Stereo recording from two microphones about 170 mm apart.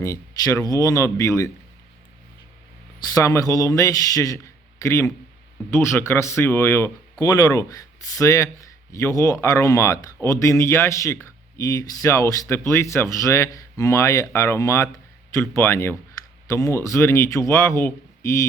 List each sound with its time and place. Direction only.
0.0 s a man's voice: 20° left (ahead or behind)
3.0 s a man's voice: 20° left (ahead or behind)